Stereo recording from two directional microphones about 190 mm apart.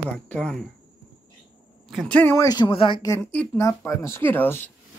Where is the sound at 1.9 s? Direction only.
5° left (ahead or behind).